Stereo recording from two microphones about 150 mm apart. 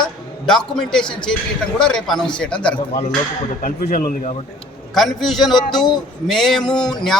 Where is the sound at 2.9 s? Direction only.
50° left (ahead or behind).